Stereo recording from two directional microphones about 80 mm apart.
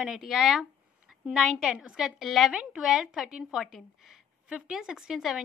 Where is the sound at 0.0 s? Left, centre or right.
Centre.